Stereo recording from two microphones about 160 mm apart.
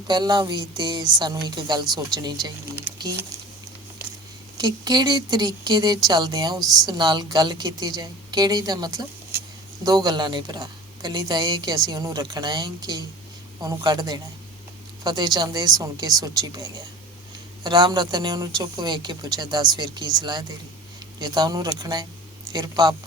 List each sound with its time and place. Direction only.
0.1 s a woman's voice: 25° right (ahead or behind)
4.5 s a woman's voice: 25° right (ahead or behind)
17.6 s a woman's voice: 30° right (ahead or behind)